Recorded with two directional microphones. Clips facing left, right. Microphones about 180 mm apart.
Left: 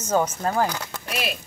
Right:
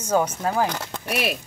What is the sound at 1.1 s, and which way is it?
Speech, 65° right (ahead or behind).